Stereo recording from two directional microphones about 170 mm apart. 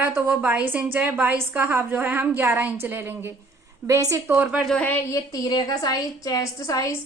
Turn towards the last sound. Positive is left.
turn(degrees=20)  # may be behind; listen again after turning